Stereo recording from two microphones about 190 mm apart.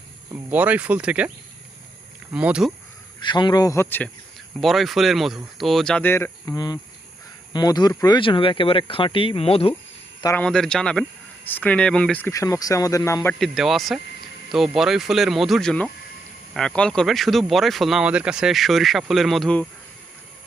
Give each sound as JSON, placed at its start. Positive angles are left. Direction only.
{"t": 0.3, "sound": "speech", "side_deg": -10}
{"t": 2.3, "sound": "speech", "side_deg": -5}
{"t": 3.2, "sound": "speech", "side_deg": 25}
{"t": 4.6, "sound": "speech", "side_deg": 0}
{"t": 10.3, "sound": "speech", "side_deg": 5}
{"t": 13.4, "sound": "speech", "side_deg": 0}